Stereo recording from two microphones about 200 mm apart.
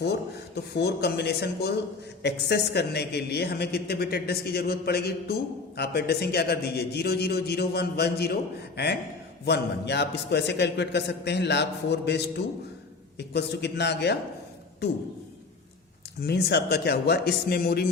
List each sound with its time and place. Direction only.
0.0 s a man's voice: 55° left (ahead or behind)
16.2 s a man's voice: 55° left (ahead or behind)